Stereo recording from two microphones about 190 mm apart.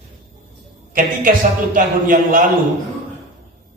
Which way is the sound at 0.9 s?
45° right (ahead or behind).